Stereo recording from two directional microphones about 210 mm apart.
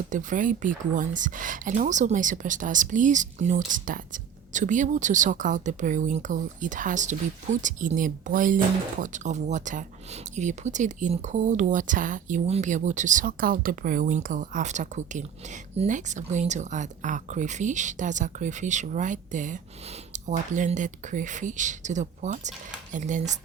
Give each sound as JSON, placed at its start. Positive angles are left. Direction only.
{"t": 0.1, "sound": "speech", "side_deg": -35}